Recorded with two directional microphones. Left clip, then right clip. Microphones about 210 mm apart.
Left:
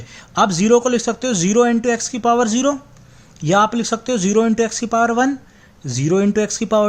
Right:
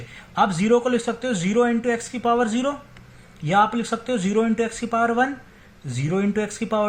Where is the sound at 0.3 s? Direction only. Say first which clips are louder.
Left 5 dB; 55° left (ahead or behind).